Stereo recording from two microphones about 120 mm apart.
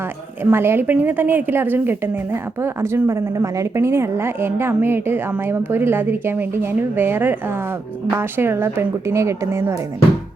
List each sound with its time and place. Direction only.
0.5 s a woman's voice: 20° right (ahead or behind)